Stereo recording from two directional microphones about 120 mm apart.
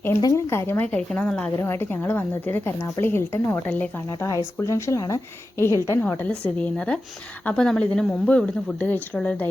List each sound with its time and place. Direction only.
0.2 s a woman's voice: 25° left (ahead or behind); by 1.5 s 5° left (ahead or behind)
1.5 s a woman's voice: 20° left (ahead or behind)